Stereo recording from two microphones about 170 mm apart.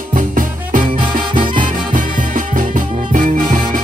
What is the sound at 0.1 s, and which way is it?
Music, 50° right (ahead or behind).